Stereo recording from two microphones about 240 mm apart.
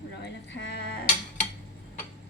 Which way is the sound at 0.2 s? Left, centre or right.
Left.